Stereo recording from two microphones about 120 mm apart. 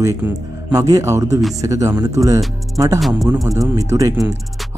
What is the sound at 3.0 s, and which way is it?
Speech, centre (ahead or behind).